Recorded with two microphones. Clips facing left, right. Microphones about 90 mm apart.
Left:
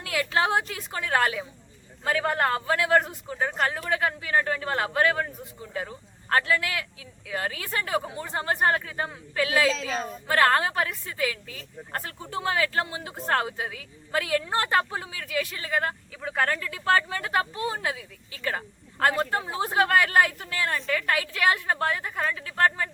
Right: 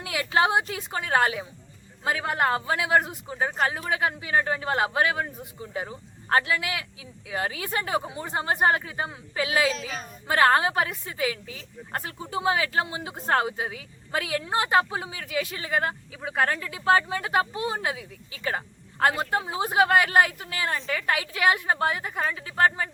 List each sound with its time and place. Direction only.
0.0 s a woman's voice: 20° right (ahead or behind)